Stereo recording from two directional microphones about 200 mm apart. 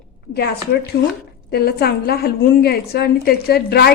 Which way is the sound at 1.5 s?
50° left (ahead or behind).